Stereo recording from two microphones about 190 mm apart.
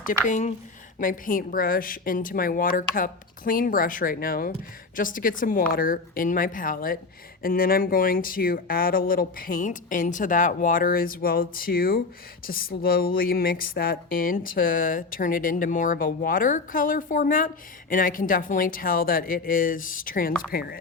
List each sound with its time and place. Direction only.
0.0 s a woman's voice: 45° left (ahead or behind)